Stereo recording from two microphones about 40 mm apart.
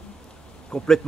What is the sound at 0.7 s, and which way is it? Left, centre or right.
Speech, centre.